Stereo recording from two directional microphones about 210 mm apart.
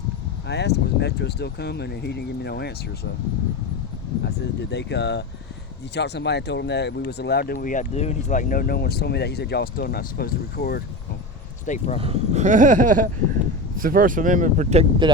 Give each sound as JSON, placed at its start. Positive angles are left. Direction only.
{"t": 0.4, "sound": "speech", "side_deg": 55}
{"t": 4.2, "sound": "speech", "side_deg": 55}
{"t": 11.6, "sound": "speech", "side_deg": 35}
{"t": 11.9, "sound": "speech", "side_deg": -30}